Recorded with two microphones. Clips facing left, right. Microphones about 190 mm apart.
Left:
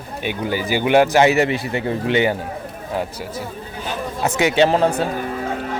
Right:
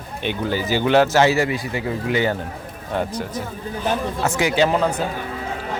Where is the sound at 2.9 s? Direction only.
5° left (ahead or behind).